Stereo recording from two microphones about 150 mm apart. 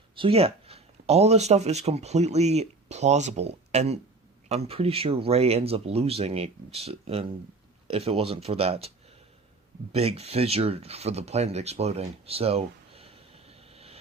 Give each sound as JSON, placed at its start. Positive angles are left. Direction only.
{"t": 0.2, "sound": "speech", "side_deg": -40}
{"t": 9.9, "sound": "speech", "side_deg": -45}